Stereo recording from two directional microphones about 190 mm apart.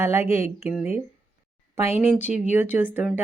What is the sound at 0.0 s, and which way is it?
Speech, 15° right (ahead or behind).